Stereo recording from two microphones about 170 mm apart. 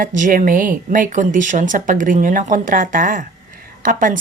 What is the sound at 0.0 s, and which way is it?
Speech, 55° right (ahead or behind).